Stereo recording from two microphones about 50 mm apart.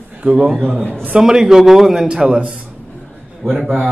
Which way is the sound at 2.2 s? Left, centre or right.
Centre.